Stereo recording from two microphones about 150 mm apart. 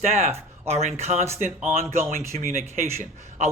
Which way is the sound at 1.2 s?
15° right (ahead or behind).